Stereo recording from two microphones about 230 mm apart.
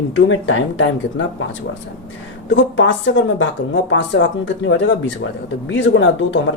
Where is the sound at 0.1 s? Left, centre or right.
Left.